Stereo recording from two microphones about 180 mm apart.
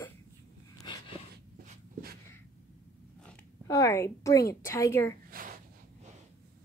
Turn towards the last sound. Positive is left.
turn(degrees=-50)  # may be behind; listen again after turning